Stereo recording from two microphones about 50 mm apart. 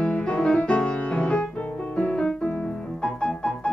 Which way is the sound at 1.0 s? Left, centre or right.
Left.